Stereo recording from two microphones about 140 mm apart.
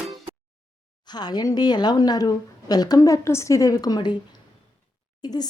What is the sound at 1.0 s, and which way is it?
A woman's voice, 30° left (ahead or behind).